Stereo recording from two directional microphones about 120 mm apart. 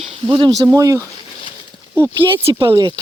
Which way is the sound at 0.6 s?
30° right (ahead or behind).